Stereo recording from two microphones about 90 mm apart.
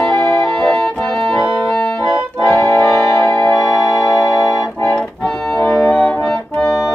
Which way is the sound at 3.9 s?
40° left (ahead or behind).